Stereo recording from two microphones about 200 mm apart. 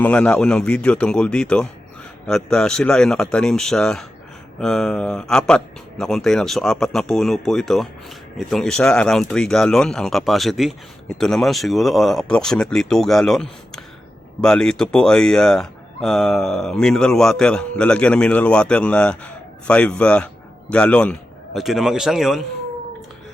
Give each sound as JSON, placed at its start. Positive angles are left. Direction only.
{"t": 0.0, "sound": "speech", "side_deg": 5}